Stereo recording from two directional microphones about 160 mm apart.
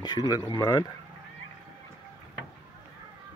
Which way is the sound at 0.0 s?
25° left (ahead or behind).